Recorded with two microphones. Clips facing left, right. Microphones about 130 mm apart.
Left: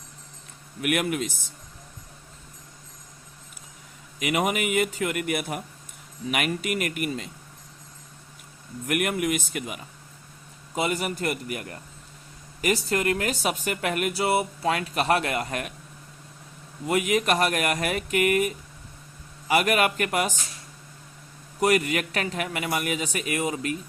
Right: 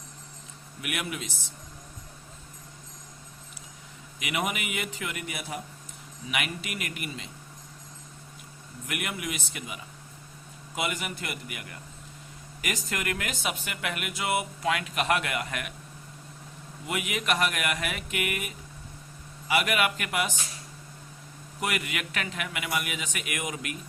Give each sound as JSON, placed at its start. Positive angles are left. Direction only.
{"t": 0.8, "sound": "a man's voice", "side_deg": 50}
{"t": 4.2, "sound": "a man's voice", "side_deg": 40}
{"t": 6.3, "sound": "a man's voice", "side_deg": 45}
{"t": 8.9, "sound": "a man's voice", "side_deg": 50}
{"t": 10.8, "sound": "speech", "side_deg": 35}
{"t": 16.8, "sound": "speech", "side_deg": 40}
{"t": 21.6, "sound": "speech", "side_deg": 40}